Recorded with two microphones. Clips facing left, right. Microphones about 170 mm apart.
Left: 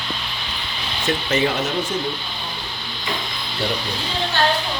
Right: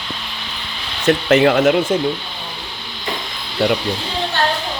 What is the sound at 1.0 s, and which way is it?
Speech, 70° right (ahead or behind).